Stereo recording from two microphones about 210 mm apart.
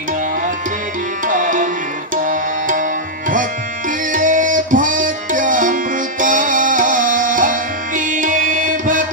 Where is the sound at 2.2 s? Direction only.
40° right (ahead or behind).